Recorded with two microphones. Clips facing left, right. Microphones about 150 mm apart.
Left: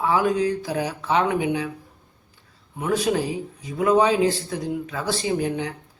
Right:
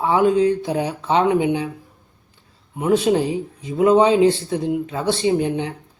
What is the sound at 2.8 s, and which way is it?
Speech, 25° right (ahead or behind).